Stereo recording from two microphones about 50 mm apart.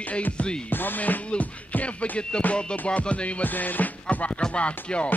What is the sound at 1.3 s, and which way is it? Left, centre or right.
Music, left.